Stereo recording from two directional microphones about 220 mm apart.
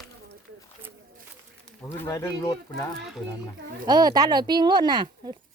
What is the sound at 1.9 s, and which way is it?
Speech, 10° left (ahead or behind).